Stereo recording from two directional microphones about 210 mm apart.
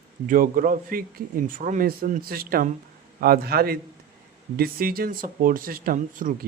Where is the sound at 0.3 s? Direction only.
40° right (ahead or behind).